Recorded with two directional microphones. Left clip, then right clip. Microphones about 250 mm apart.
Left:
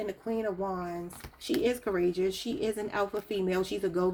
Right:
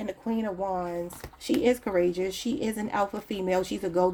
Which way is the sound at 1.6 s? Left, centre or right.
Right.